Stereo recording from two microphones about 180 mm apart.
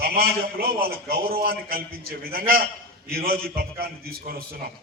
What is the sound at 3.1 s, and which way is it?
Speech, 55° right (ahead or behind).